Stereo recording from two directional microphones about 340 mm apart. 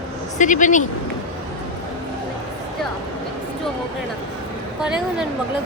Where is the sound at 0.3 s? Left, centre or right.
Left.